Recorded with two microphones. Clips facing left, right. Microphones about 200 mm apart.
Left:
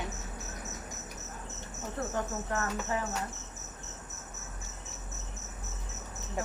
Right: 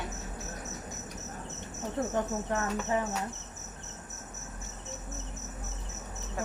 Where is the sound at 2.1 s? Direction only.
20° right (ahead or behind).